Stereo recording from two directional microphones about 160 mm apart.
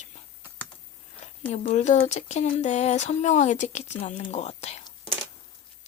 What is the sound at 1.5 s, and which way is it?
Speech, 45° left (ahead or behind).